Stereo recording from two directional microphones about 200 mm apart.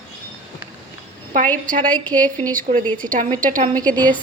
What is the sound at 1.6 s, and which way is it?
Speech, 40° right (ahead or behind).